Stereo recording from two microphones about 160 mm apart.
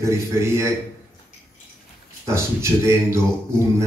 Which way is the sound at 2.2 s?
15° right (ahead or behind).